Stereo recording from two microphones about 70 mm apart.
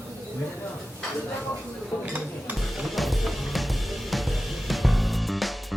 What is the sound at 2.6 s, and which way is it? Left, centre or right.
Drum kit, centre.